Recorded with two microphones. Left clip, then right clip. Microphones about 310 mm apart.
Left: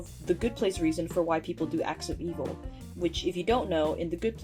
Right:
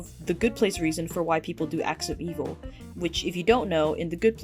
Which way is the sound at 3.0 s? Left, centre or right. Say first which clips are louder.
Right 1 dB; right.